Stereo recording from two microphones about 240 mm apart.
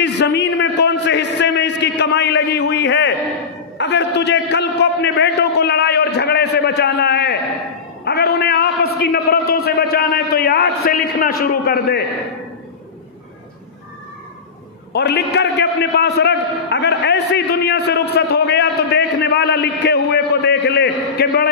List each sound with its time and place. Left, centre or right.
0.0 s a sound: left
8.0 s a man's voice: left
14.9 s a man's voice: left